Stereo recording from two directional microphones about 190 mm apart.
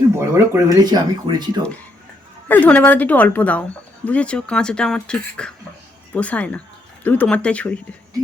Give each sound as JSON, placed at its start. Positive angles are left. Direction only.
{"t": 0.2, "sound": "speech", "side_deg": -15}
{"t": 2.5, "sound": "a woman's voice", "side_deg": 10}